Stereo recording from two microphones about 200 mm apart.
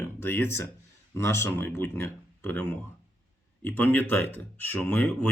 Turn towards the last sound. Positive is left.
turn(degrees=10)  # may be behind; listen again after turning